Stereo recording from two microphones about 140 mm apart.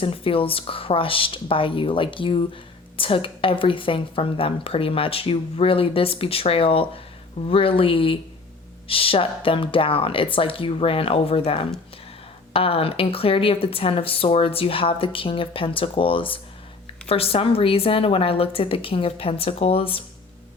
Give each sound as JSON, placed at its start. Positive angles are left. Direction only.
{"t": 0.0, "sound": "a woman's voice", "side_deg": 40}